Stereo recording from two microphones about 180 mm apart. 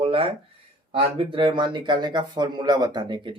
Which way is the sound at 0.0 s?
30° right (ahead or behind).